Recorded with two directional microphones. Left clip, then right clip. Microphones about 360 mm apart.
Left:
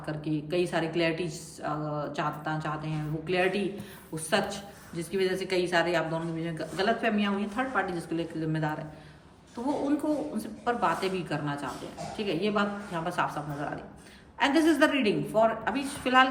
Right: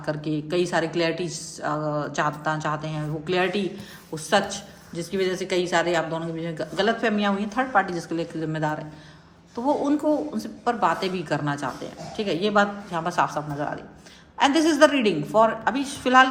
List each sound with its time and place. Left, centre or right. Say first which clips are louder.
0.0 s a woman's voice: right 6 dB; centre
10.3 s a woman's voice: right 4 dB; centre